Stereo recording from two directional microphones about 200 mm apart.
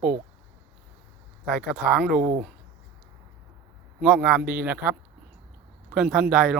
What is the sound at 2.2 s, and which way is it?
Speech, 35° right (ahead or behind).